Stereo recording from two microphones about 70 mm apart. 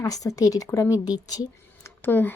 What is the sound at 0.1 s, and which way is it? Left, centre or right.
Speech, left.